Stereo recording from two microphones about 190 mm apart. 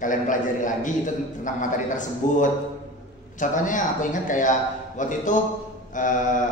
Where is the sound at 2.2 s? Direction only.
40° left (ahead or behind).